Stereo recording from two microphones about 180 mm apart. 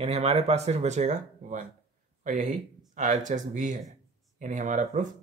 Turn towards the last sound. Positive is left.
turn(degrees=-45)  # may be behind; listen again after turning